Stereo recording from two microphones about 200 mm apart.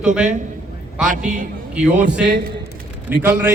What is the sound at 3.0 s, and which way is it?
Speech, 10° right (ahead or behind).